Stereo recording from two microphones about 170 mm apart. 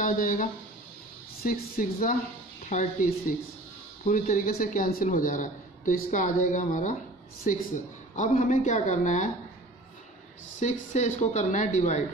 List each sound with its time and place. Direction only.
0.0 s a man's voice: 55° left (ahead or behind)
10.6 s a man's voice: 45° left (ahead or behind)